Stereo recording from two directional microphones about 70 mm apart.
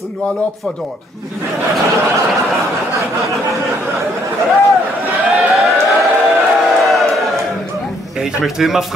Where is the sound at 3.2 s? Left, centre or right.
Right.